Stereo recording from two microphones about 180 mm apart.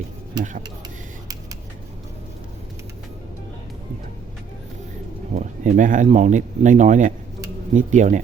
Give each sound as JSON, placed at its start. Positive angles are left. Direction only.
{"t": 5.3, "sound": "speech", "side_deg": -45}